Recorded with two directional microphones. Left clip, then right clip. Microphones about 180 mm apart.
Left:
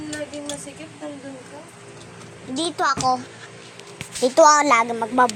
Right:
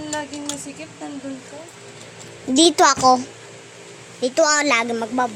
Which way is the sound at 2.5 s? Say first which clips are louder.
Right 8 dB; 60° right (ahead or behind).